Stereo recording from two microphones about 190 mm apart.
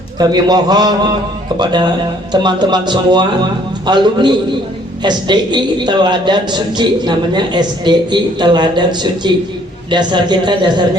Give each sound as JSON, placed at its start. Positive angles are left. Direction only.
{"t": 0.2, "sound": "a woman's voice", "side_deg": -20}